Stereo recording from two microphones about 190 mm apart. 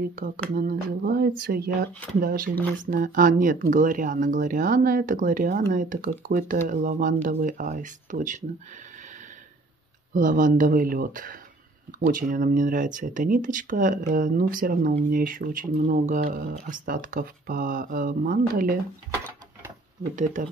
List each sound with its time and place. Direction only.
0.6 s speech: 50° right (ahead or behind)
10.1 s speech: 45° right (ahead or behind)
20.4 s speech: 45° right (ahead or behind)